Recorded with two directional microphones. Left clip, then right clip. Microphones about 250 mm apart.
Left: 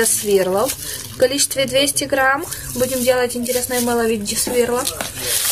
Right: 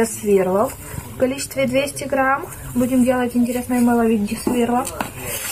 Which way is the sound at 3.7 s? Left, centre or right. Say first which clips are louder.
Right 1 dB; left.